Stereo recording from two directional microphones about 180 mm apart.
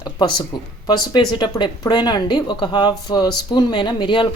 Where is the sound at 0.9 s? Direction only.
25° left (ahead or behind).